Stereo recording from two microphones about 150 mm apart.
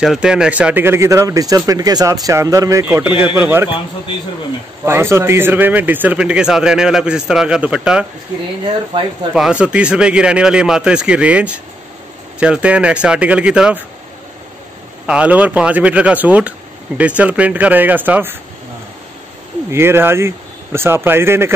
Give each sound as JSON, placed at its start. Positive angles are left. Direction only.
{"t": 0.0, "sound": "speech", "side_deg": -5}
{"t": 2.9, "sound": "speech", "side_deg": -10}
{"t": 4.8, "sound": "speech", "side_deg": -15}
{"t": 8.9, "sound": "speech", "side_deg": -30}
{"t": 9.3, "sound": "speech", "side_deg": -5}
{"t": 15.0, "sound": "speech", "side_deg": -10}
{"t": 19.7, "sound": "speech", "side_deg": -15}